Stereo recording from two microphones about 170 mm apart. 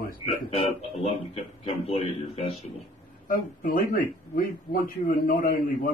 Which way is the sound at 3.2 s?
55° left (ahead or behind).